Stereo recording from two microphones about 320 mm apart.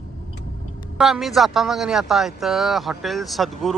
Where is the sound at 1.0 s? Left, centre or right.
Centre.